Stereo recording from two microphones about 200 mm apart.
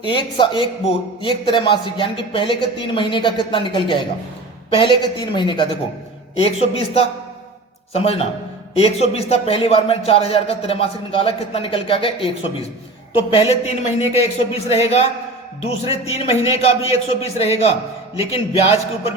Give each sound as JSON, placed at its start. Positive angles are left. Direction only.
{"t": 0.0, "sound": "a man's voice", "side_deg": 25}